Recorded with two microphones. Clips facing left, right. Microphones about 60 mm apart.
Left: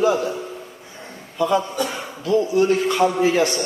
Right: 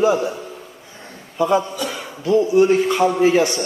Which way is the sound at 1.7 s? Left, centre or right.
Left.